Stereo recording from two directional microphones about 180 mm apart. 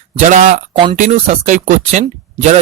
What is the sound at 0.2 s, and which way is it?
Speech, 40° right (ahead or behind).